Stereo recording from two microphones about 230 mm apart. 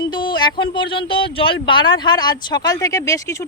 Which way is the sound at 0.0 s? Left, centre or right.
Centre.